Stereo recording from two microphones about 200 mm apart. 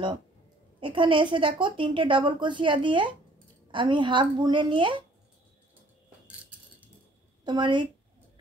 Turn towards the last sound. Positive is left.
turn(degrees=-25)  # may be behind; listen again after turning